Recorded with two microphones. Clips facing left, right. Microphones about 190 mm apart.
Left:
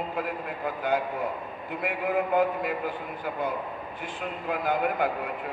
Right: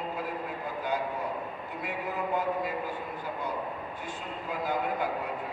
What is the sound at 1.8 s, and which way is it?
Speech, 60° left (ahead or behind).